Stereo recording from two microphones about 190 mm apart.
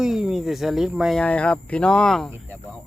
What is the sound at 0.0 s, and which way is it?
Speech, 5° right (ahead or behind).